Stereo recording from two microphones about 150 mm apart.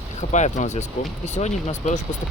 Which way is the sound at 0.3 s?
55° left (ahead or behind).